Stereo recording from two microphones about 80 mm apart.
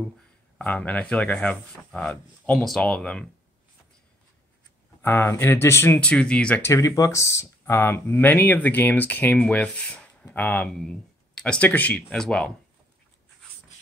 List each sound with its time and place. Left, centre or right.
0.6 s speech: centre
5.0 s speech: left
5.9 s speech: centre
6.6 s speech: left; by 10.7 s centre
10.7 s speech: centre